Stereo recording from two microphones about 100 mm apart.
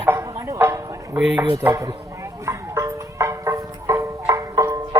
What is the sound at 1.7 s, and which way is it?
Speech, 35° right (ahead or behind).